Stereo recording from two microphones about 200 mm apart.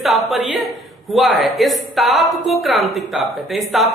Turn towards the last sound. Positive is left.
turn(degrees=0)  # may be behind; listen again after turning